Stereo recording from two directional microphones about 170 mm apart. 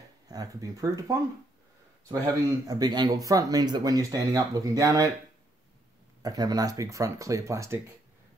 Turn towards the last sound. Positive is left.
turn(degrees=-15)  # may be behind; listen again after turning